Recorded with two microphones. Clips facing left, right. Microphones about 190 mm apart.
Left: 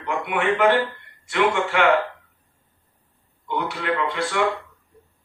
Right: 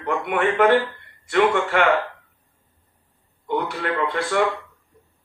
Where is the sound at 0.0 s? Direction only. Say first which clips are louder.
Right 2 dB; 50° right (ahead or behind).